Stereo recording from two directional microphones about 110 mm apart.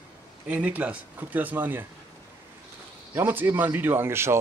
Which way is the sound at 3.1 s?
20° right (ahead or behind).